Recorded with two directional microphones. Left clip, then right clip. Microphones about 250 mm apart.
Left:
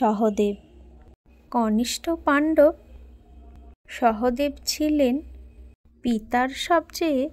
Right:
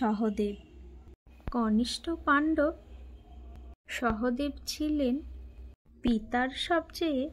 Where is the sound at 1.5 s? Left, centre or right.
Left.